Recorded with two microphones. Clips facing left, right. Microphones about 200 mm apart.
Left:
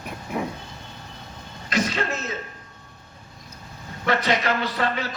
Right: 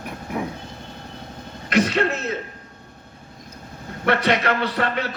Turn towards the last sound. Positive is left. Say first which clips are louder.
# right 2 dB
turn(degrees=-60)  # may be behind; listen again after turning